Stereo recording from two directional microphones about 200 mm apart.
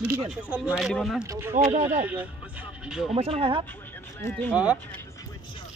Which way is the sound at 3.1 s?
30° right (ahead or behind).